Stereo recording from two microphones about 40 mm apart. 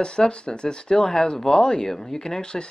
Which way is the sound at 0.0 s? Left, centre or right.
Left.